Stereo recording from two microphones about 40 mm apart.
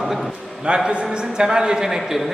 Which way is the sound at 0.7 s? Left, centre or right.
Right.